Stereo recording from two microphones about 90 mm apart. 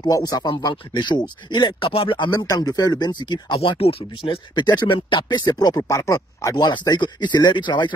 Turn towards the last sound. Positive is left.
turn(degrees=60)  # may be behind; listen again after turning